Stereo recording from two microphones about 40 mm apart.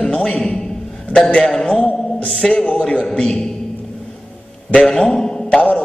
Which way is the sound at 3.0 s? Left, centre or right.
Centre.